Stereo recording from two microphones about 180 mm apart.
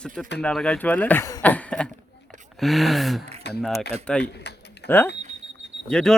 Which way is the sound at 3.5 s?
70° left (ahead or behind).